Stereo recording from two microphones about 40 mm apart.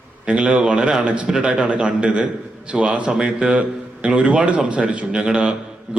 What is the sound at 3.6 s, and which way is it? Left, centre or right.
A man's voice, right.